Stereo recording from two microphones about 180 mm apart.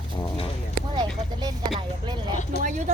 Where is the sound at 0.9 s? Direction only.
25° right (ahead or behind).